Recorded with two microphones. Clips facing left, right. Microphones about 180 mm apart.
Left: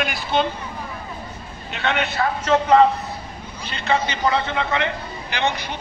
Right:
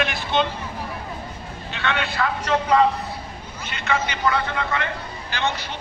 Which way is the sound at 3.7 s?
30° left (ahead or behind).